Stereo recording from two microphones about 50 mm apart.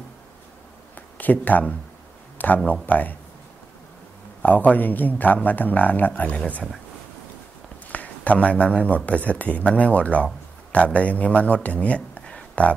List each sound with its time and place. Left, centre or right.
0.9 s a sound: left
2.3 s a man's voice: left
4.4 s a man's voice: left
7.9 s speech: left